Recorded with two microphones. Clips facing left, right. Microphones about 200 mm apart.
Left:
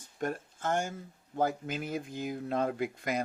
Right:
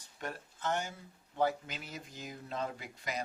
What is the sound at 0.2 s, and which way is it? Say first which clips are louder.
Speech: left 7 dB; 50° left (ahead or behind).